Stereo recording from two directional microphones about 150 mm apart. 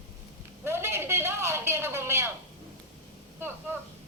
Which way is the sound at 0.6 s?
15° right (ahead or behind).